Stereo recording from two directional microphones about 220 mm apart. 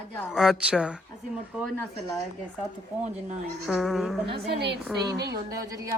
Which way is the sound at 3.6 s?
Centre (ahead or behind).